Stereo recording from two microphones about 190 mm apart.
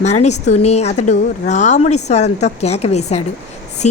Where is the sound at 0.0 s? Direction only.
35° left (ahead or behind).